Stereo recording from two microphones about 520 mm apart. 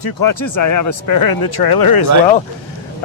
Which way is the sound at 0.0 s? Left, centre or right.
Left.